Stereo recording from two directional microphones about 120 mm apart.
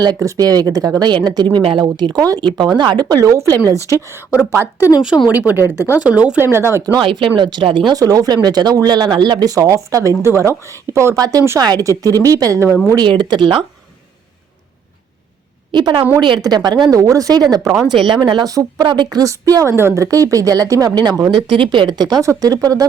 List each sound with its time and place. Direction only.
0.0 s a woman's voice: 30° right (ahead or behind)
5.7 s speech: 25° left (ahead or behind)
6.1 s speech: 10° right (ahead or behind)
7.0 s speech: 45° right (ahead or behind)
7.9 s a woman's voice: 30° right (ahead or behind)
12.6 s a woman's voice: 15° left (ahead or behind)
12.9 s a woman's voice: 40° right (ahead or behind)
15.7 s a woman's voice: 40° right (ahead or behind)
17.6 s speech: centre (ahead or behind)
18.1 s a woman's voice: 40° right (ahead or behind)